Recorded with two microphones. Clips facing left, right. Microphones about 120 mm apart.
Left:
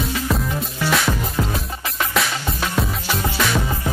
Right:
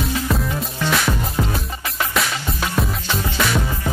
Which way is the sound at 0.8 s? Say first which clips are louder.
Even; centre (ahead or behind).